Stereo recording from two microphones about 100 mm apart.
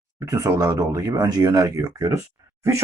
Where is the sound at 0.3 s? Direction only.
40° right (ahead or behind).